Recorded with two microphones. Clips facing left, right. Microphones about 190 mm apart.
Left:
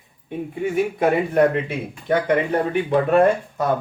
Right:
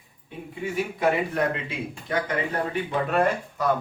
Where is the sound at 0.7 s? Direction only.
55° left (ahead or behind).